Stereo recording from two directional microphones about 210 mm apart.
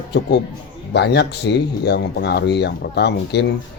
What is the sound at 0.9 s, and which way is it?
Speech, 55° left (ahead or behind).